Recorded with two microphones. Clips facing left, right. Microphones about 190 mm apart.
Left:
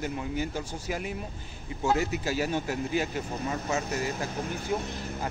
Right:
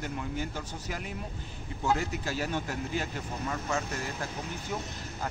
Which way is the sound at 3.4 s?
20° left (ahead or behind).